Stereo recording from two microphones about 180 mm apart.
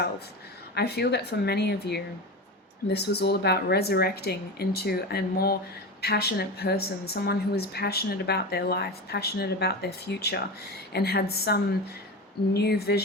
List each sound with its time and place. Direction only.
0.7 s a woman's voice: 65° left (ahead or behind)